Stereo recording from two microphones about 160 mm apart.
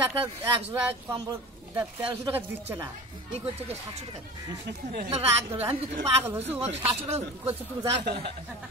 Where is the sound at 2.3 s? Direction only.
15° right (ahead or behind).